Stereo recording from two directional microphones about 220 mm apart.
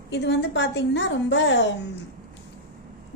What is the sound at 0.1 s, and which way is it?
Speech, 50° left (ahead or behind).